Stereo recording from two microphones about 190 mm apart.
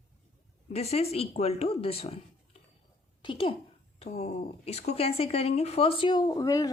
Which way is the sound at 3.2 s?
25° left (ahead or behind).